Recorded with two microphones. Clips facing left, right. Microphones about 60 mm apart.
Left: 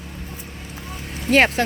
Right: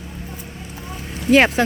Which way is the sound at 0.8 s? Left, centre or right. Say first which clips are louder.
Right 2 dB; right.